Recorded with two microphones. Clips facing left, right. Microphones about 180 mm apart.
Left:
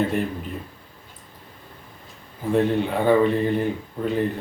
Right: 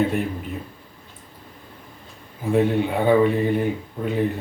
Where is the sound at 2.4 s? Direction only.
10° right (ahead or behind).